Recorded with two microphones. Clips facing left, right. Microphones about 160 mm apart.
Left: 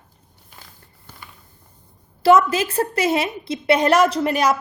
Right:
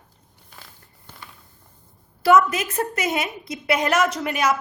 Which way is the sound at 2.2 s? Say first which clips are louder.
Left 2 dB; 30° left (ahead or behind).